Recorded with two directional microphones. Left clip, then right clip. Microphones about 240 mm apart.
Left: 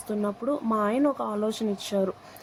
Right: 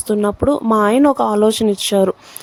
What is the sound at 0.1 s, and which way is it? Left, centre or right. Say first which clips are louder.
Speech: right 12 dB; right.